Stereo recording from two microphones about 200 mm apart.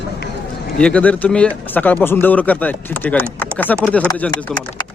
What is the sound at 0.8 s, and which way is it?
Speech, 5° left (ahead or behind).